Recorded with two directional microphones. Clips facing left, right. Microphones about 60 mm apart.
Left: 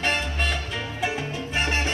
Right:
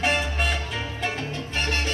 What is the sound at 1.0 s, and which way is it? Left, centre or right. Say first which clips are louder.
Salsa music: left 3 dB; centre.